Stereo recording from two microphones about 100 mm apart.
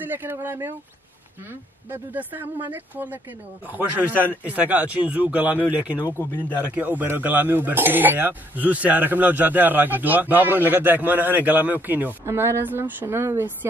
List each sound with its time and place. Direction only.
0.0 s speech: 20° right (ahead or behind)